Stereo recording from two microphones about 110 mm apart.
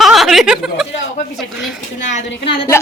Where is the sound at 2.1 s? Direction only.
55° left (ahead or behind).